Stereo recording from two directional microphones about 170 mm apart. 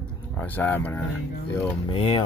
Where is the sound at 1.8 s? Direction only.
30° left (ahead or behind).